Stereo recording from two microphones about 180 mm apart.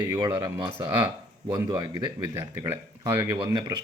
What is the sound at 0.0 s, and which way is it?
Speech, 20° right (ahead or behind).